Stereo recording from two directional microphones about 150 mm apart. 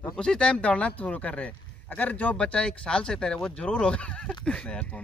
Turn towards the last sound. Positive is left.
turn(degrees=5)  # may be behind; listen again after turning